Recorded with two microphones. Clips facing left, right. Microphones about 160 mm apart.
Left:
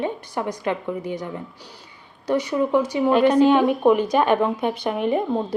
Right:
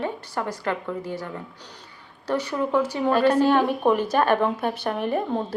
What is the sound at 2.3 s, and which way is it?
A woman's voice, 15° left (ahead or behind).